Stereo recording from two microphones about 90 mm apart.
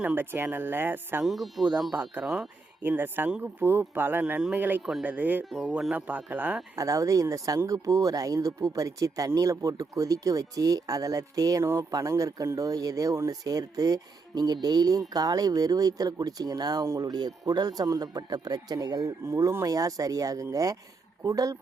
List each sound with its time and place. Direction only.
0.0 s speech: 20° right (ahead or behind)
1.2 s speech: centre (ahead or behind)
1.9 s speech: 20° right (ahead or behind)
2.2 s speech: 10° right (ahead or behind)
2.8 s speech: 20° right (ahead or behind)
4.8 s speech: 5° right (ahead or behind)
5.0 s speech: 20° right (ahead or behind)
5.5 s speech: 5° right (ahead or behind)
6.7 s speech: 35° right (ahead or behind)
19.3 s speech: 35° right (ahead or behind)